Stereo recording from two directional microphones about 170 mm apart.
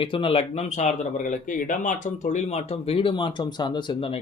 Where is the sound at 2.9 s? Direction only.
30° left (ahead or behind).